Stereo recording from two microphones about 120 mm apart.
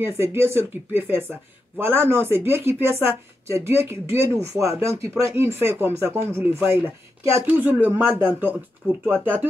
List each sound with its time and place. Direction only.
0.0 s speech: 20° right (ahead or behind)